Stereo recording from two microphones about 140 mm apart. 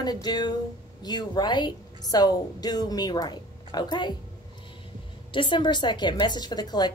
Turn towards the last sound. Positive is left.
turn(degrees=30)  # may be behind; listen again after turning